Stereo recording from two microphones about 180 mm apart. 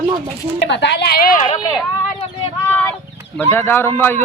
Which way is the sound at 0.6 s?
70° left (ahead or behind).